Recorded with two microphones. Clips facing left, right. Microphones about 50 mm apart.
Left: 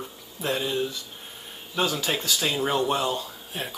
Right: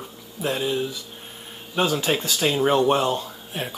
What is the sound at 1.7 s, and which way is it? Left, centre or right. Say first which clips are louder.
Speech: right 4 dB; right.